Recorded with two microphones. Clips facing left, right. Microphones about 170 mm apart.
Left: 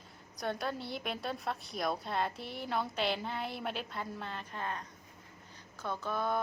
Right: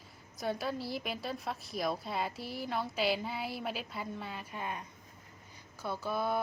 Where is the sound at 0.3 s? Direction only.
5° right (ahead or behind).